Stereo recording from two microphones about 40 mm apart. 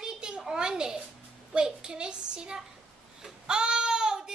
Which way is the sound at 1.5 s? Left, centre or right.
Centre.